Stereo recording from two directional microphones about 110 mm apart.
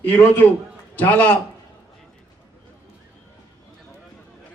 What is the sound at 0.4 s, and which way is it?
Speech, 20° left (ahead or behind).